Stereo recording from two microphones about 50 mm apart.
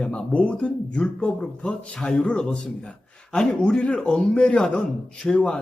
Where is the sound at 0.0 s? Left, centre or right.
Centre.